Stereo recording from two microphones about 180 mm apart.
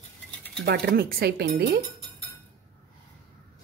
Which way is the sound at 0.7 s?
60° right (ahead or behind).